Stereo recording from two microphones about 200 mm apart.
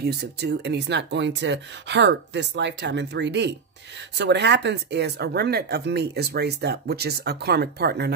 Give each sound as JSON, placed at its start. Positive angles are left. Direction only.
{"t": 0.0, "sound": "speech", "side_deg": -55}